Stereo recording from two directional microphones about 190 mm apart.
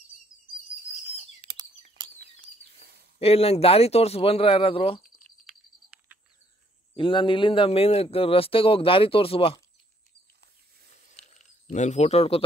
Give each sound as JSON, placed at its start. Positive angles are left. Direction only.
{"t": 1.4, "sound": "bird", "side_deg": -25}
{"t": 2.1, "sound": "bird", "side_deg": -55}
{"t": 3.2, "sound": "speech", "side_deg": 30}
{"t": 7.0, "sound": "a man's voice", "side_deg": 25}
{"t": 11.3, "sound": "speech", "side_deg": 40}